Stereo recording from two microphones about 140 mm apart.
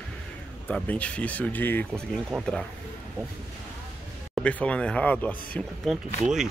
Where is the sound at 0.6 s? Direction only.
10° left (ahead or behind).